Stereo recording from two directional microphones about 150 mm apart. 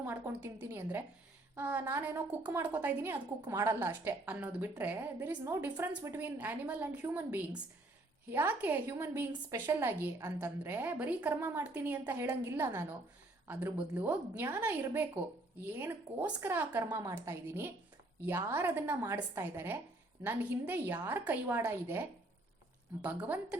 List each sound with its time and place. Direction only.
0.0 s a woman's voice: 15° right (ahead or behind)